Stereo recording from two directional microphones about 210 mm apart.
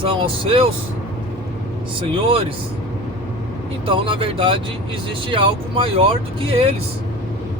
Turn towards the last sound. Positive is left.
turn(degrees=-25)  # may be behind; listen again after turning